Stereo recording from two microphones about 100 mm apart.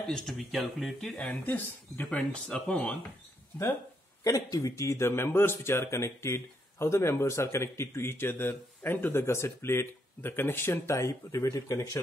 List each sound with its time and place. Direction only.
0.1 s speech: centre (ahead or behind)
1.1 s speech: 10° left (ahead or behind)
4.2 s a man's voice: 35° left (ahead or behind)